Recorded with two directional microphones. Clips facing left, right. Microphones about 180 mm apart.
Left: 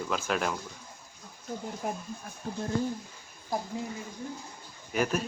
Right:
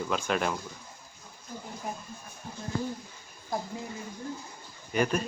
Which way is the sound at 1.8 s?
60° left (ahead or behind).